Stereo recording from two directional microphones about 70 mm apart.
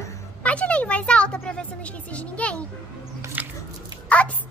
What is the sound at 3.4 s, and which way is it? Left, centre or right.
Biting, right.